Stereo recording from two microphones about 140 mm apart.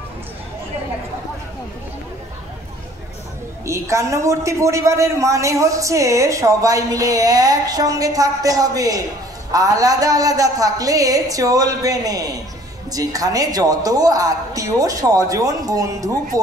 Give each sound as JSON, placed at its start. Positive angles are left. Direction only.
{"t": 3.6, "sound": "a man's voice", "side_deg": -20}